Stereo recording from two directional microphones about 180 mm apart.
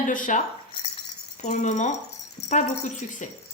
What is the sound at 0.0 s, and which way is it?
A woman's voice, 45° left (ahead or behind).